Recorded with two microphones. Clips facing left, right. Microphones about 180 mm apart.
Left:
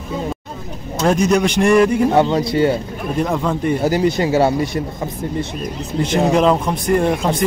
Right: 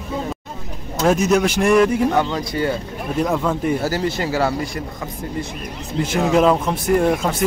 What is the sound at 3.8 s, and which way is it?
Speech, 20° left (ahead or behind).